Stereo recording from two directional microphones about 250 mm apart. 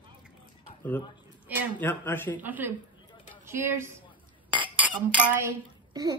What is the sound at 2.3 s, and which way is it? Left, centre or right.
Speech, centre.